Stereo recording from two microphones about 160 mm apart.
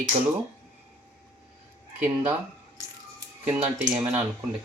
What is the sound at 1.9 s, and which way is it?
Speech, 10° right (ahead or behind).